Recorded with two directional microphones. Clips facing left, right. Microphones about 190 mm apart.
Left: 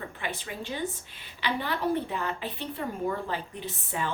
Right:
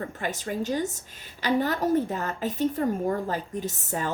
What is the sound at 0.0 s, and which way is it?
A woman's voice, 45° right (ahead or behind).